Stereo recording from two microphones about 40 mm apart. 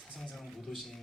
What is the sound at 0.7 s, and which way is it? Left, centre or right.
Speech, centre.